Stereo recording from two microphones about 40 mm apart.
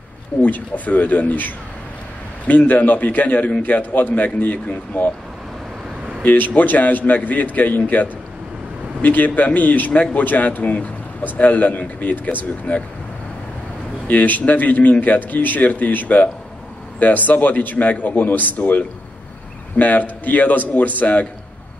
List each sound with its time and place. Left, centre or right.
0.5 s a man's voice: left
6.2 s a man's voice: left
14.0 s a man's voice: left